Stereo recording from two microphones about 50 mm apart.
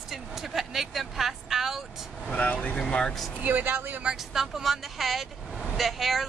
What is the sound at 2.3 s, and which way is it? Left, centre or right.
Speech, left.